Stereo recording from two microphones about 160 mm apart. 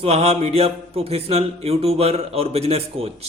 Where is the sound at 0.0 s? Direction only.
40° right (ahead or behind).